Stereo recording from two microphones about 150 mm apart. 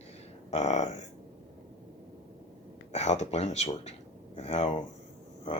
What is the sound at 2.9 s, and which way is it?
Speech, 45° left (ahead or behind).